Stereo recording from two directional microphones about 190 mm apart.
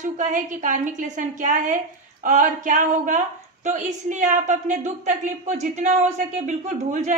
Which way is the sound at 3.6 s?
40° right (ahead or behind).